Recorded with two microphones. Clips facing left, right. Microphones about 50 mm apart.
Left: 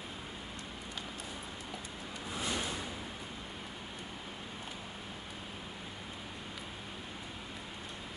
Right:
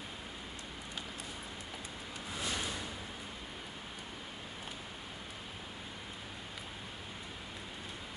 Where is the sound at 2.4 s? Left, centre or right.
Centre.